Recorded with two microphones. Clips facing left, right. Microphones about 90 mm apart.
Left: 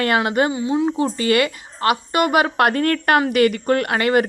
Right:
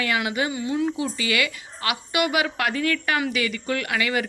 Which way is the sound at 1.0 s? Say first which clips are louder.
Left 7 dB; 45° left (ahead or behind).